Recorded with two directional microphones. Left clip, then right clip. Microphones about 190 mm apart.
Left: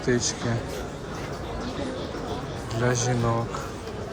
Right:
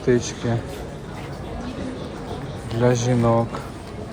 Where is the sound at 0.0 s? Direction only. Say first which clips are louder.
Right 4 dB; 5° left (ahead or behind).